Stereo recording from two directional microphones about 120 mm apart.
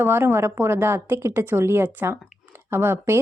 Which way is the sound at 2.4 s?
20° right (ahead or behind).